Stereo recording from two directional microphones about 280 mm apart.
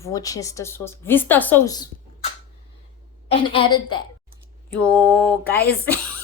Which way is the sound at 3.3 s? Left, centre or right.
Centre.